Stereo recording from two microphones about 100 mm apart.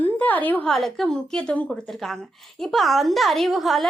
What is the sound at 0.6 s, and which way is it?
A woman's voice, centre (ahead or behind).